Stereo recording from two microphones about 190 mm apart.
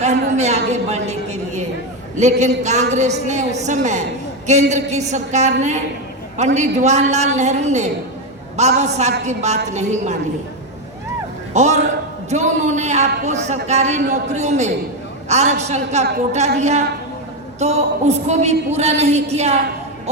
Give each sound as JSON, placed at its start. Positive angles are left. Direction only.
{"t": 0.0, "sound": "a woman's voice", "side_deg": -35}
{"t": 11.5, "sound": "a man's voice", "side_deg": -35}